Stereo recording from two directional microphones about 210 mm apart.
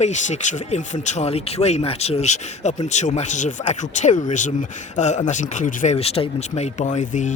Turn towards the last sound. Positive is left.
turn(degrees=35)  # may be behind; listen again after turning